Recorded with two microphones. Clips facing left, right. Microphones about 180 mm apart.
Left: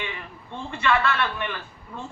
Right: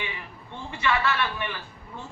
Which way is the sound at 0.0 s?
15° right (ahead or behind).